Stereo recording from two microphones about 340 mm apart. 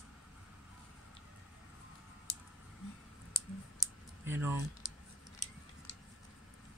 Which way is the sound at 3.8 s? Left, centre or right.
Centre.